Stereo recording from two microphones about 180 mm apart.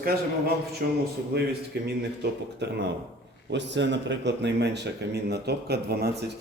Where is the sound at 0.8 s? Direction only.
60° right (ahead or behind).